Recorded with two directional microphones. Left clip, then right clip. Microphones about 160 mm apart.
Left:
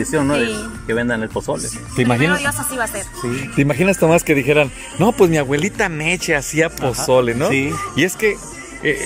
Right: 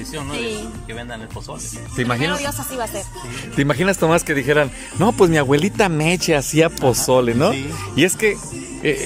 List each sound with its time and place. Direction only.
0.1 s speech: 70° left (ahead or behind)
2.0 s speech: 15° left (ahead or behind)
2.3 s speech: 10° right (ahead or behind)
3.5 s speech: 5° left (ahead or behind)
5.5 s speech: 10° right (ahead or behind)
7.9 s speech: centre (ahead or behind)